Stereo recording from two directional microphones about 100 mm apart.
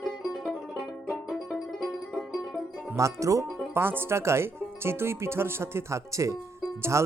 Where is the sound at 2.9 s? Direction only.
30° right (ahead or behind).